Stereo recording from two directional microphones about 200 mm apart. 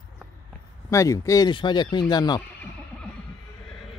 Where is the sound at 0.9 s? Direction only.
15° left (ahead or behind).